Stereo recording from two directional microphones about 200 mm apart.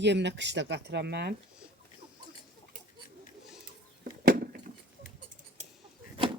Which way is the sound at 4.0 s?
45° right (ahead or behind).